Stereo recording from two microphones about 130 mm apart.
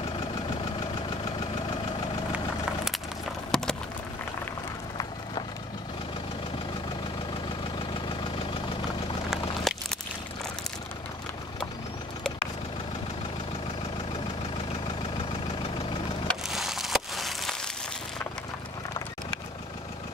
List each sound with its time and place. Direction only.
2.3 s vehicle: 5° right (ahead or behind)
3.5 s run: 5° left (ahead or behind)
8.2 s vehicle: 40° left (ahead or behind)
9.3 s a sound: centre (ahead or behind)
16.3 s wood: centre (ahead or behind)